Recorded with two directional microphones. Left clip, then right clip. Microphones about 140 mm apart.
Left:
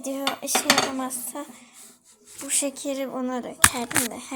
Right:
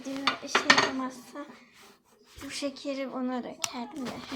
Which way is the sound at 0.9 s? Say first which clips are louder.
Left 5 dB; 25° left (ahead or behind).